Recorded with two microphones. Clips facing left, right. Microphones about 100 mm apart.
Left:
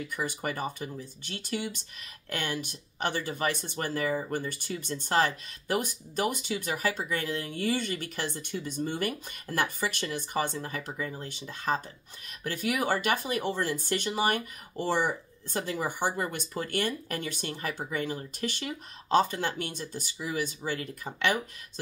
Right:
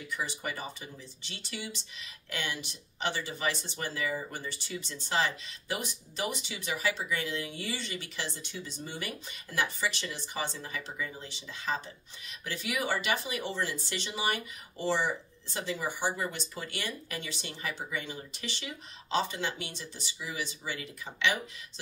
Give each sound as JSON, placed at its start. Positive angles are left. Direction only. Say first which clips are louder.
{"t": 0.1, "sound": "speech", "louder": "even", "side_deg": 50}